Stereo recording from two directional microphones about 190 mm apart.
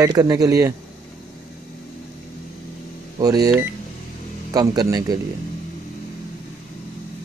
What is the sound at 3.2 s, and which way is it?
Speech, 20° right (ahead or behind).